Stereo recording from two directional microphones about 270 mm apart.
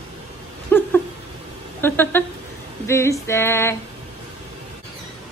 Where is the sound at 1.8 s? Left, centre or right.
Centre.